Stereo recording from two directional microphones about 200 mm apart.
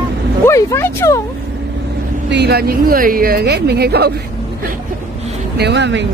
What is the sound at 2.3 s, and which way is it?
Speech, 55° right (ahead or behind).